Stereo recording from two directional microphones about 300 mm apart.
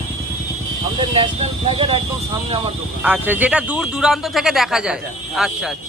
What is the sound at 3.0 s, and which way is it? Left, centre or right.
Speech, centre.